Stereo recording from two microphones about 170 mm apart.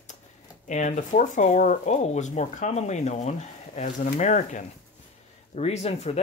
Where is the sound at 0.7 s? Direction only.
45° left (ahead or behind).